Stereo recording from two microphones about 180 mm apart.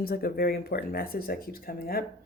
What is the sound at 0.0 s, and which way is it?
Speech, 55° left (ahead or behind).